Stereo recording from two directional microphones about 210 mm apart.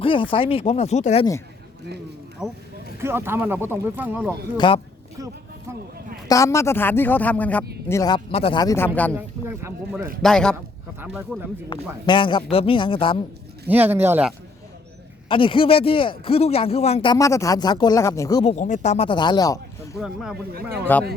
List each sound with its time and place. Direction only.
0.0 s speech: 25° left (ahead or behind)
2.4 s a man's voice: 5° right (ahead or behind)
4.5 s speech: 20° left (ahead or behind)
6.2 s speech: 15° left (ahead or behind)
9.1 s speech: 10° right (ahead or behind)
10.2 s a man's voice: 5° left (ahead or behind)
11.7 s speech: 25° left (ahead or behind)
13.7 s speech: 10° right (ahead or behind)
15.3 s speech: 25° left (ahead or behind)
18.4 s speech: 35° left (ahead or behind); by 21.0 s 10° left (ahead or behind)